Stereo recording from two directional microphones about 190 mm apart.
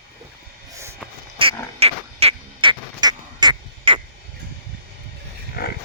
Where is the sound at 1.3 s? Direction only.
30° right (ahead or behind).